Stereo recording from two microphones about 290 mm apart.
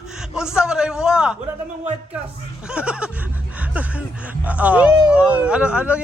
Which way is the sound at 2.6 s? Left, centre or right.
Centre.